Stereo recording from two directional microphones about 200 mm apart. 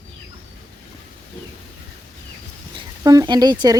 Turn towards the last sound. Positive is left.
turn(degrees=-20)  # may be behind; listen again after turning